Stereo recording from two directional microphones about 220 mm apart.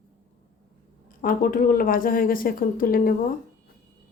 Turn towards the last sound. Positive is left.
turn(degrees=40)  # may be behind; listen again after turning